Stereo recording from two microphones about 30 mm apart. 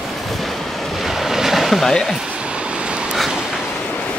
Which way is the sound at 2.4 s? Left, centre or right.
Right.